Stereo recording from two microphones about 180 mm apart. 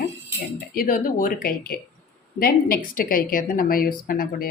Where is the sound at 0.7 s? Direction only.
50° left (ahead or behind).